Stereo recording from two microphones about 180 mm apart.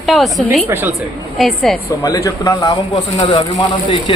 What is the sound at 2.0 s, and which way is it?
Speech, 20° left (ahead or behind).